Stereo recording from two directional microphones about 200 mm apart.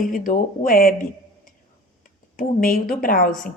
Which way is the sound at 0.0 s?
45° left (ahead or behind).